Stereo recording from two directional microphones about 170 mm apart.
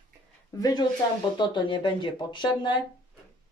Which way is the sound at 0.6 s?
25° left (ahead or behind).